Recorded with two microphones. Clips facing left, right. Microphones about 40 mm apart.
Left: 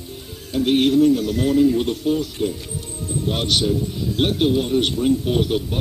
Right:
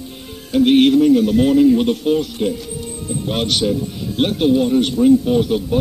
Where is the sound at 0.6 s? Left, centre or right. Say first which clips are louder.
Right 4 dB; right.